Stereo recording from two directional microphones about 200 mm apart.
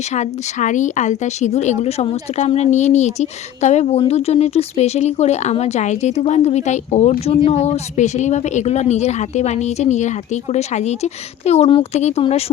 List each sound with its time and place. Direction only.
0.1 s a woman's voice: 35° left (ahead or behind)